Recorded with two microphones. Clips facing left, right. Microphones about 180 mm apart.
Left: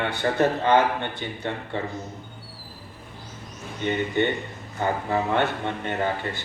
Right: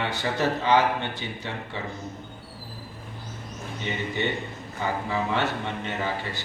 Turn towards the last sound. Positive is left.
turn(degrees=55)  # may be behind; listen again after turning